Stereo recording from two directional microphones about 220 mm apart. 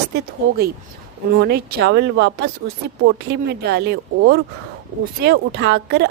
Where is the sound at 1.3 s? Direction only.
45° right (ahead or behind).